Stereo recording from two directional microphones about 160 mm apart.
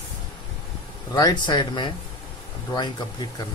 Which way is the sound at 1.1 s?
25° left (ahead or behind).